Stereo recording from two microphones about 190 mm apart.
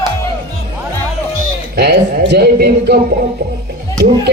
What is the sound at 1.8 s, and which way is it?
Speech, 60° right (ahead or behind).